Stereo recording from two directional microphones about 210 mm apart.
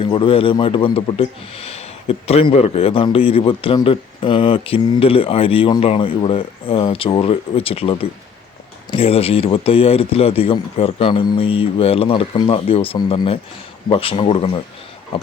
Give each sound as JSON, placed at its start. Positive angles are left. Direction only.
{"t": 0.0, "sound": "a man's voice", "side_deg": 25}